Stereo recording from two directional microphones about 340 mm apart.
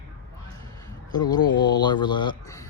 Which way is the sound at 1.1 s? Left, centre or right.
Centre.